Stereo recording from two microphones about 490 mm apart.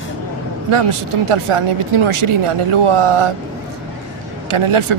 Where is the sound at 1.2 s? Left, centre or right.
Right.